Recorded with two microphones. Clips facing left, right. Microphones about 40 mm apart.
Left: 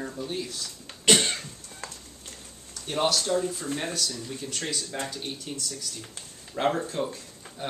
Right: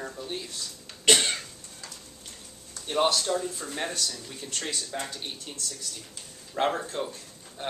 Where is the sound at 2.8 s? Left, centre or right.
Centre.